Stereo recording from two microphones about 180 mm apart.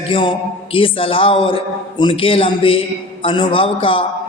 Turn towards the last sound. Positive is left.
turn(degrees=30)  # may be behind; listen again after turning